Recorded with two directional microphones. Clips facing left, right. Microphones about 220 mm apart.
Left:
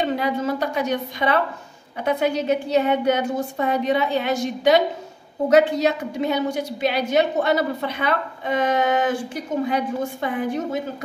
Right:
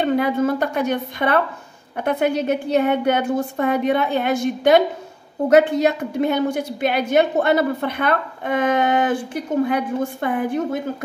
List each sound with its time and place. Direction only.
0.0 s a woman's voice: 55° right (ahead or behind)